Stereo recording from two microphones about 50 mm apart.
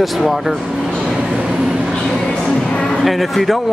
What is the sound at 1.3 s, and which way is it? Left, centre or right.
Vehicle, centre.